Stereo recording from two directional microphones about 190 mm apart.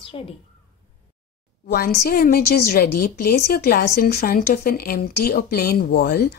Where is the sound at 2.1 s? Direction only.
50° left (ahead or behind).